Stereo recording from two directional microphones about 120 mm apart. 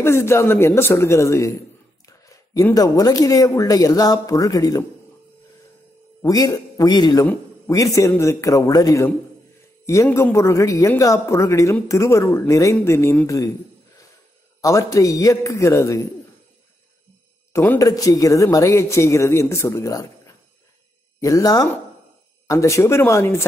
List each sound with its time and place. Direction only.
0.0 s speech: 20° left (ahead or behind)
6.2 s speech: 30° left (ahead or behind)
10.3 s speech: 25° left (ahead or behind)
14.6 s speech: 25° left (ahead or behind)
17.5 s speech: 20° left (ahead or behind)